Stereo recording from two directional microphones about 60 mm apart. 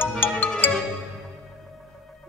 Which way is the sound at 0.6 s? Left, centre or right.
Left.